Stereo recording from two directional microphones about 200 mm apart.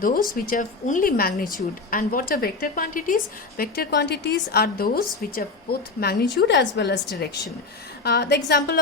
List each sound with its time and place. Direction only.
0.0 s a woman's voice: 45° left (ahead or behind); by 7.0 s 60° left (ahead or behind)
8.0 s a woman's voice: 55° left (ahead or behind)